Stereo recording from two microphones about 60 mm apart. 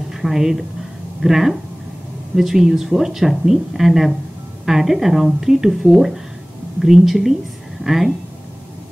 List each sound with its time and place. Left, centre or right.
0.1 s speech: centre